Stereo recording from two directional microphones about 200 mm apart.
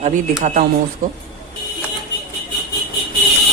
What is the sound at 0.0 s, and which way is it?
Speech, 35° right (ahead or behind).